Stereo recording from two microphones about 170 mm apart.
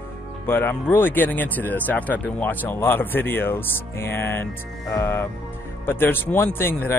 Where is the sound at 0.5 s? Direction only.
10° left (ahead or behind).